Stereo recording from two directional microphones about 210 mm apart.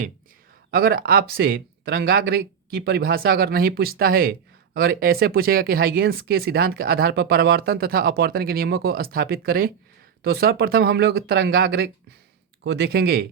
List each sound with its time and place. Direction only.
0.7 s speech: 45° right (ahead or behind)